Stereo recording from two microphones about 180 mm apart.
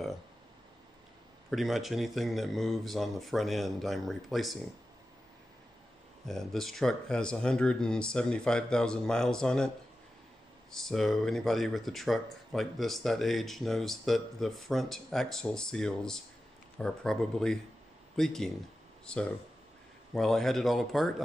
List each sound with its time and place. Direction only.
1.5 s speech: centre (ahead or behind)
6.2 s speech: centre (ahead or behind)
10.7 s speech: centre (ahead or behind)